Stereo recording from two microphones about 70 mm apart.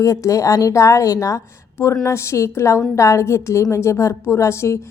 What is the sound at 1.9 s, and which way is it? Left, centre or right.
Speech, left.